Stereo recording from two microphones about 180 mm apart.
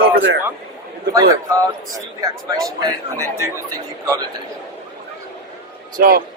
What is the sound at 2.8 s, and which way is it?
Speech, 20° right (ahead or behind).